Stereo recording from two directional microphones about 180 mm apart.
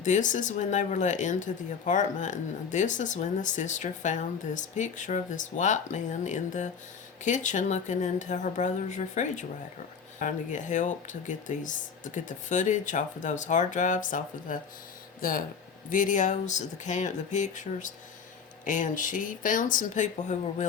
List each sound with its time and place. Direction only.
0.0 s speech: 45° left (ahead or behind)